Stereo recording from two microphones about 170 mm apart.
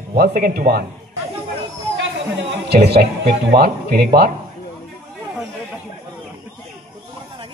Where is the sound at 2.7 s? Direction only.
70° right (ahead or behind).